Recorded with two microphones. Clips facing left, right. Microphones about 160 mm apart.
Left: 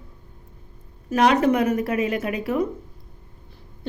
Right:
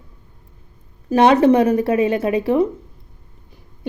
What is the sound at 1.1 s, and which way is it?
Speech, 30° right (ahead or behind).